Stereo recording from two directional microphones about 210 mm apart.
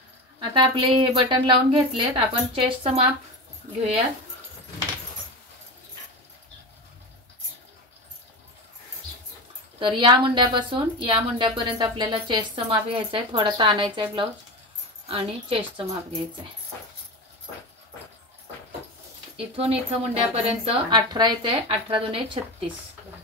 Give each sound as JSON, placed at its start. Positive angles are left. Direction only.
{"t": 0.4, "sound": "a woman's voice", "side_deg": -25}
{"t": 9.8, "sound": "a woman's voice", "side_deg": -25}
{"t": 19.3, "sound": "a woman's voice", "side_deg": -25}